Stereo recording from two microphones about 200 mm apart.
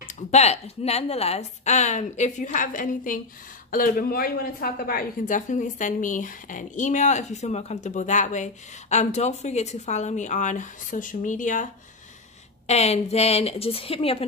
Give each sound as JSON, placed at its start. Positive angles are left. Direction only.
{"t": 0.1, "sound": "a woman's voice", "side_deg": 35}
{"t": 12.6, "sound": "a woman's voice", "side_deg": 30}